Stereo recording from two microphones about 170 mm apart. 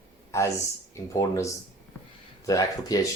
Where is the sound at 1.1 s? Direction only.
20° left (ahead or behind).